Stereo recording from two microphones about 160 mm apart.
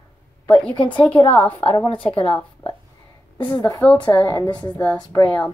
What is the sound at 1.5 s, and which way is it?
Speech, 35° left (ahead or behind).